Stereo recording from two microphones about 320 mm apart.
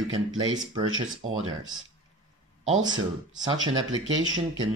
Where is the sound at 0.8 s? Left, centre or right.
Right.